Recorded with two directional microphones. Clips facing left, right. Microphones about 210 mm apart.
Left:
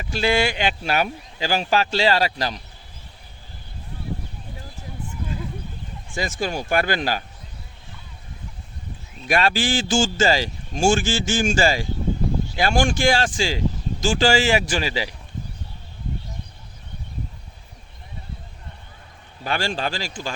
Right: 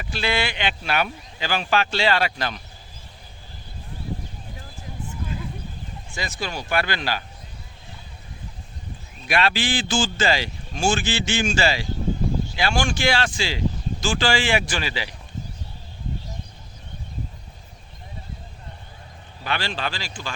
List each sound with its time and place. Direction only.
0.1 s speech: 45° left (ahead or behind)
6.1 s speech: 45° left (ahead or behind)
9.2 s speech: 45° left (ahead or behind)
19.5 s speech: 45° left (ahead or behind)